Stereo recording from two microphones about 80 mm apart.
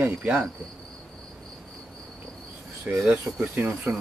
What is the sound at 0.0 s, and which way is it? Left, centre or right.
Speech, right.